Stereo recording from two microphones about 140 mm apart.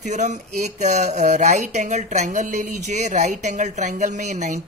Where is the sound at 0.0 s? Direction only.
60° right (ahead or behind).